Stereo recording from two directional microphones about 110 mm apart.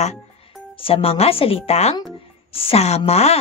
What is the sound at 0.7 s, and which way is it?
Speech, 60° left (ahead or behind).